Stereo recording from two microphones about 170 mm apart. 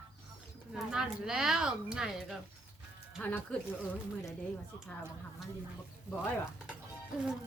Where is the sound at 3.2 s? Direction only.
10° left (ahead or behind).